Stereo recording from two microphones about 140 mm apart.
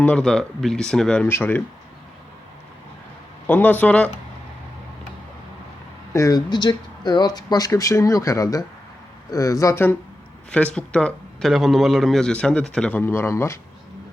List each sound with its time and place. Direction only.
0.0 s a man's voice: 5° left (ahead or behind)
3.4 s a man's voice: 10° left (ahead or behind)
6.1 s a man's voice: 25° left (ahead or behind)